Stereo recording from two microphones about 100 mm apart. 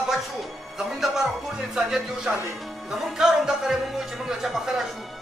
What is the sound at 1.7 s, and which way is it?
Speech, 5° right (ahead or behind).